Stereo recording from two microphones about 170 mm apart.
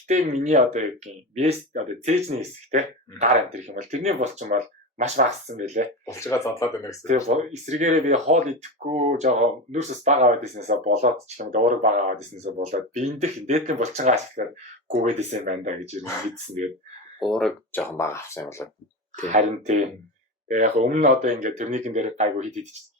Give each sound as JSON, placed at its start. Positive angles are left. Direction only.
{"t": 0.1, "sound": "speech", "side_deg": -45}
{"t": 6.1, "sound": "speech", "side_deg": 15}
{"t": 7.3, "sound": "speech", "side_deg": -45}
{"t": 17.2, "sound": "speech", "side_deg": 0}
{"t": 19.3, "sound": "speech", "side_deg": -45}